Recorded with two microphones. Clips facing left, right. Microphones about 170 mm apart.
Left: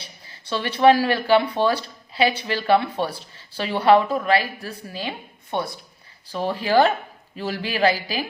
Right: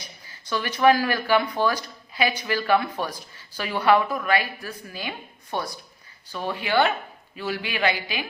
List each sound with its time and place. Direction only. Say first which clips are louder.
0.0 s a man's voice: left 1 dB; 30° left (ahead or behind)